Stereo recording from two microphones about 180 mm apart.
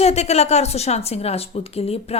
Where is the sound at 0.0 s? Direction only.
35° left (ahead or behind).